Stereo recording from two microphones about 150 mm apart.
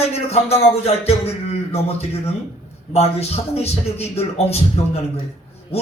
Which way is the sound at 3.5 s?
45° left (ahead or behind).